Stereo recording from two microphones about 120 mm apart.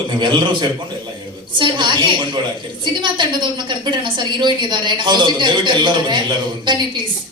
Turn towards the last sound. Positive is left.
turn(degrees=-40)  # may be behind; listen again after turning